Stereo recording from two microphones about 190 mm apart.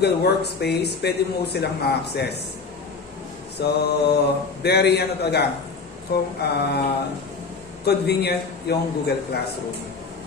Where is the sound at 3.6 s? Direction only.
60° left (ahead or behind).